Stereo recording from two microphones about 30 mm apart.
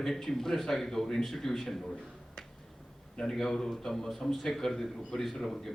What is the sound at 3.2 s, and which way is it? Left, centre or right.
A man's voice, centre.